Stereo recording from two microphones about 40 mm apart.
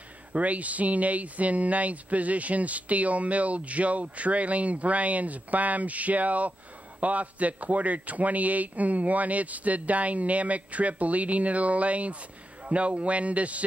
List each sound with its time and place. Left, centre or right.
0.3 s speech: right